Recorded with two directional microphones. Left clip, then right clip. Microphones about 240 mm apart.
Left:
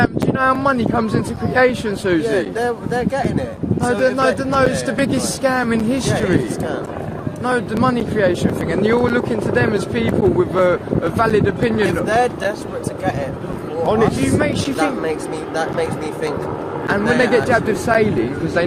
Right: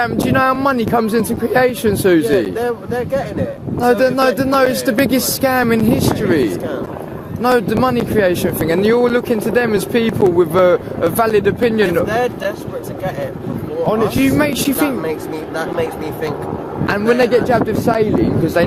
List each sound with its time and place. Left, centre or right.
0.0 s speech: right
2.6 s speech: centre
3.8 s speech: right
7.4 s speech: right
12.0 s speech: centre
13.8 s speech: centre
14.3 s speech: right
15.5 s speech: centre
16.8 s speech: right